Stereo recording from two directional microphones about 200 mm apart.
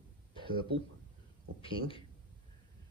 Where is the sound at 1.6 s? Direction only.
25° left (ahead or behind).